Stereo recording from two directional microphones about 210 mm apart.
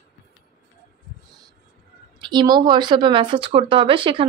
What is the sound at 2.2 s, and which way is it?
Speech, 20° right (ahead or behind).